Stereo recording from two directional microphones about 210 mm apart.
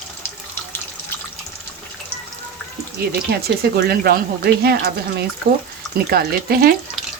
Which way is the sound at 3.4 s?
50° right (ahead or behind).